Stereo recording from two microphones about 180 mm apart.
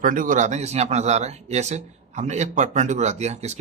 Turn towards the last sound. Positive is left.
turn(degrees=-40)  # may be behind; listen again after turning